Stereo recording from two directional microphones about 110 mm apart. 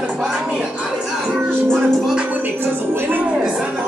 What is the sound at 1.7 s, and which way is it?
Music, 5° right (ahead or behind).